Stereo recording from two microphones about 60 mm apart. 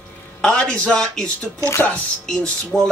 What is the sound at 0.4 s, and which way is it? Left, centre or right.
A man's voice, centre.